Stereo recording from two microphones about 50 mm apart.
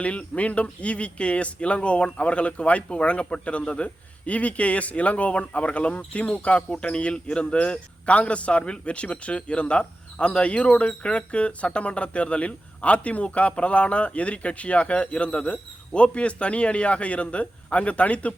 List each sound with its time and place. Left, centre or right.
0.0 s speech: left